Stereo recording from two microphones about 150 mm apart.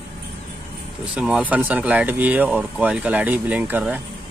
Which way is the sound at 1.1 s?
5° right (ahead or behind).